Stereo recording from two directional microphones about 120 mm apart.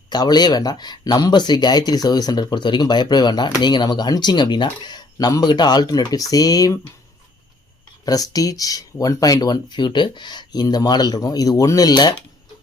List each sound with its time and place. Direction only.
0.1 s speech: 35° left (ahead or behind)
8.0 s speech: 30° left (ahead or behind)